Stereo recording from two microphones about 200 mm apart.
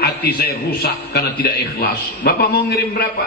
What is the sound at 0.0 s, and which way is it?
A man's voice, 55° left (ahead or behind).